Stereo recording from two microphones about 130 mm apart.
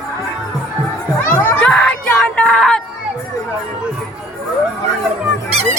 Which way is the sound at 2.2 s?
10° left (ahead or behind).